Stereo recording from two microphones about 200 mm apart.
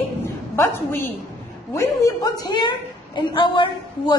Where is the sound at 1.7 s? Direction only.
15° left (ahead or behind).